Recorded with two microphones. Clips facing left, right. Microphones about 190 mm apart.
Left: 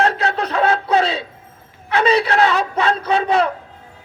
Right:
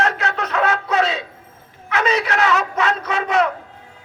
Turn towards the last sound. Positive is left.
turn(degrees=30)  # may be behind; listen again after turning